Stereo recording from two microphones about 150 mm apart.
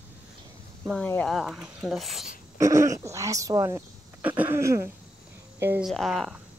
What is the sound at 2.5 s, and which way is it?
Speech, 20° right (ahead or behind).